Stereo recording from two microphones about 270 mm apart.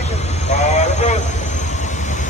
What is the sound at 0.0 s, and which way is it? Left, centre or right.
Vehicle, left.